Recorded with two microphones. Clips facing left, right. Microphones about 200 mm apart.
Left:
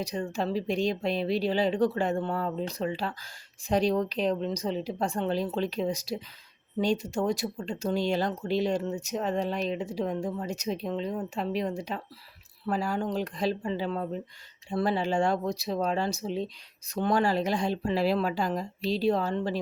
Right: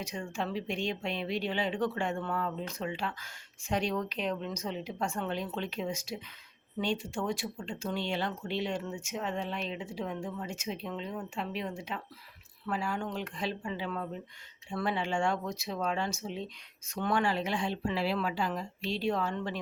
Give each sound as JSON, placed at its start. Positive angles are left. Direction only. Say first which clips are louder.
{"t": 0.0, "sound": "speech", "louder": "left 6 dB", "side_deg": 35}